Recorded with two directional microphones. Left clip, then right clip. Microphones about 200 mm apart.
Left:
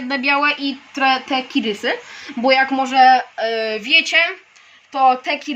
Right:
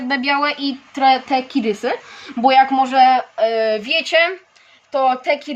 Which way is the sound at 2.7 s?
55° right (ahead or behind).